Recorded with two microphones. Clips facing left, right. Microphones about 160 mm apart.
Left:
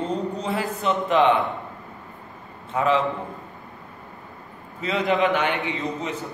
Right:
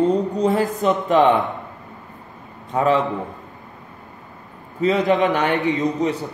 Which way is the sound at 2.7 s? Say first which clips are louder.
Right 3 dB; 40° right (ahead or behind).